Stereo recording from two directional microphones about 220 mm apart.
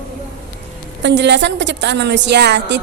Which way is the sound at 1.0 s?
50° right (ahead or behind).